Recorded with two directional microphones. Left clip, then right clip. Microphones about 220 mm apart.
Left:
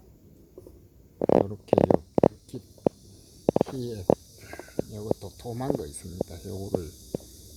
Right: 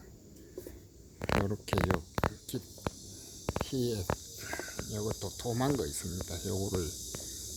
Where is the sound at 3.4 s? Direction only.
20° right (ahead or behind).